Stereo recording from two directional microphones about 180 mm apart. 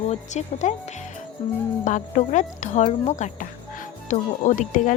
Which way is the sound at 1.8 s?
45° left (ahead or behind).